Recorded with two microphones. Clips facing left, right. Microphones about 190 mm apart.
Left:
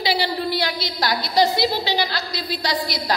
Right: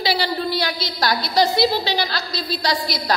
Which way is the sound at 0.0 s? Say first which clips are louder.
Right 1 dB; 20° left (ahead or behind).